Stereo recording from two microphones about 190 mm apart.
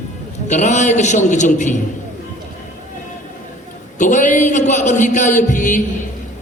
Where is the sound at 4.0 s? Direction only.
40° left (ahead or behind).